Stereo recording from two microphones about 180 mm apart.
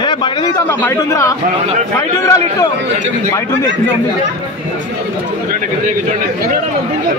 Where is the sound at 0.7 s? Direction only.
15° left (ahead or behind).